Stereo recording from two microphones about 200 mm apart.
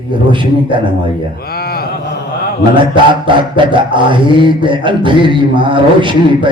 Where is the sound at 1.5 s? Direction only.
50° left (ahead or behind).